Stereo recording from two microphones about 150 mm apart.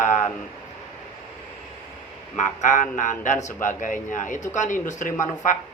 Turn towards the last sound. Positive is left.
turn(degrees=20)  # may be behind; listen again after turning